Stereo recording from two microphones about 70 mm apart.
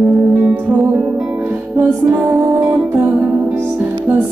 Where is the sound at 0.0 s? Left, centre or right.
Right.